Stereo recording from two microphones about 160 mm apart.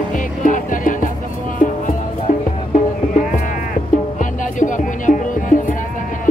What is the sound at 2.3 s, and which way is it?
Music, 60° left (ahead or behind).